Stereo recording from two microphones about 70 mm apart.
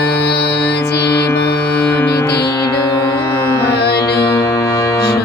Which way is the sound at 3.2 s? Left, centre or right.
Left.